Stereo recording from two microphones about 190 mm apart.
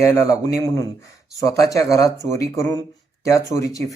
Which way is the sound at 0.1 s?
15° left (ahead or behind).